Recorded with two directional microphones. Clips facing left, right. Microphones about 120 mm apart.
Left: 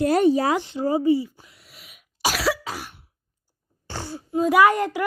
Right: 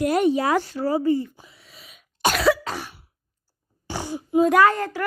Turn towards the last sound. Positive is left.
turn(degrees=15)  # may be behind; listen again after turning